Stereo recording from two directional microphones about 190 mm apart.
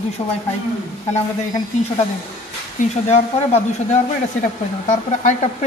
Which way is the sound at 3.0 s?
35° left (ahead or behind).